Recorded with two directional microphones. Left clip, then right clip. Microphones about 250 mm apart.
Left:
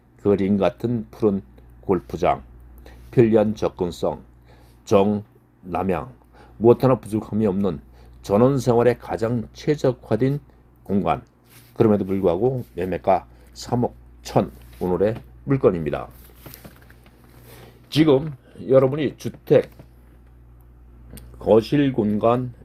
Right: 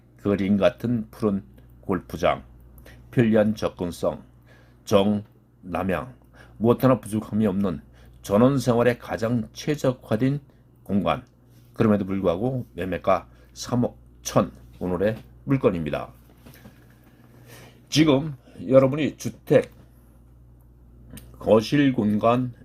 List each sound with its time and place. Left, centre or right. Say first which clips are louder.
0.2 s speech: left 2 dB; left
17.9 s speech: left 3 dB; left
21.3 s speech: left 2 dB; left